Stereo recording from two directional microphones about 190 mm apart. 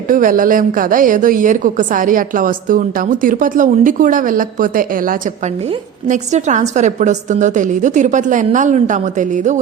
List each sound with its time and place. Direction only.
0.1 s a woman's voice: 45° right (ahead or behind)